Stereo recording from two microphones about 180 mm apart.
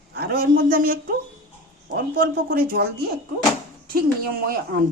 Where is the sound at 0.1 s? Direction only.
60° right (ahead or behind).